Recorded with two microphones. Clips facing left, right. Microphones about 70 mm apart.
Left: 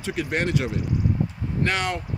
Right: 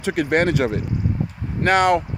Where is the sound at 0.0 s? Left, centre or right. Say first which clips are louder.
Right 7 dB; right.